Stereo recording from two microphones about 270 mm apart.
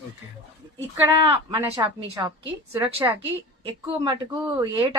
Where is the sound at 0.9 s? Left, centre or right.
Centre.